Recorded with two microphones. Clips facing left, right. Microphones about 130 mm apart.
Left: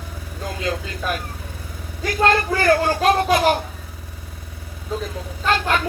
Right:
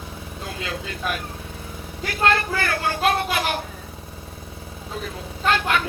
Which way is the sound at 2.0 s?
40° left (ahead or behind).